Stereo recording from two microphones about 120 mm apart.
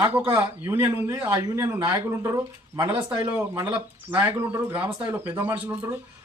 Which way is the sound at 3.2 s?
15° right (ahead or behind).